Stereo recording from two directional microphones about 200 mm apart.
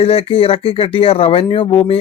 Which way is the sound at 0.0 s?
30° left (ahead or behind).